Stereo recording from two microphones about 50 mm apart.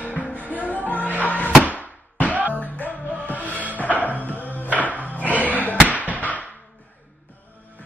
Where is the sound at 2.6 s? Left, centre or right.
Left.